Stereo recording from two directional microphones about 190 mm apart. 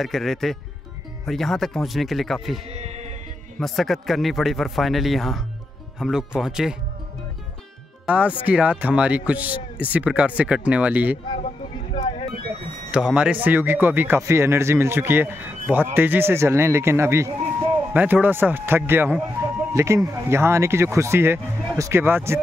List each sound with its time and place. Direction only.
0.0 s a man's voice: centre (ahead or behind)
2.7 s music: 35° right (ahead or behind)
3.5 s a man's voice: centre (ahead or behind)
8.1 s speech: 5° right (ahead or behind)
11.3 s a sound: 40° left (ahead or behind)
12.9 s speech: 5° right (ahead or behind)